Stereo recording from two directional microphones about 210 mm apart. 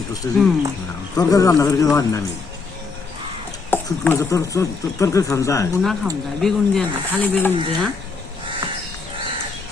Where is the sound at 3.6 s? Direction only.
10° left (ahead or behind).